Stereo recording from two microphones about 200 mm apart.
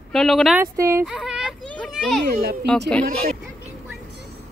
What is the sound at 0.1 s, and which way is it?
Speech, centre (ahead or behind).